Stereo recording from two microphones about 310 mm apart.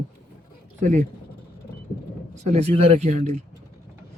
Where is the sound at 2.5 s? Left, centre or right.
Centre.